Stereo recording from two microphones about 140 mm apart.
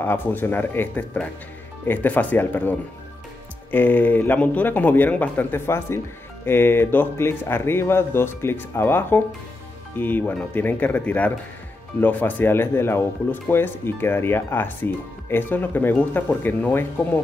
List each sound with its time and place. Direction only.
0.0 s speech: 15° left (ahead or behind)